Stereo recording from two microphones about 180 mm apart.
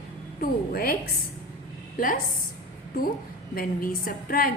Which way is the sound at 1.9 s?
50° left (ahead or behind).